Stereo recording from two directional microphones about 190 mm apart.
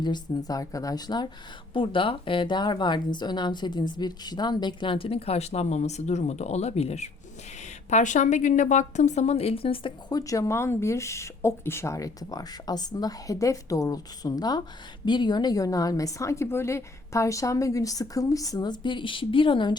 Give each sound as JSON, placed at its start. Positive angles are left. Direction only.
{"t": 0.0, "sound": "a woman's voice", "side_deg": 20}